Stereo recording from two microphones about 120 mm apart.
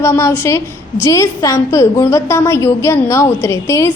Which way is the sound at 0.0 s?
25° left (ahead or behind).